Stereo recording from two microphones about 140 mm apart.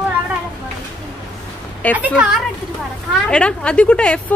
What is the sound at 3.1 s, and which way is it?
A woman's voice, 5° left (ahead or behind).